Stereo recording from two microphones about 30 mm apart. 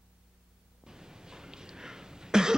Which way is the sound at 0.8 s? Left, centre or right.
Right.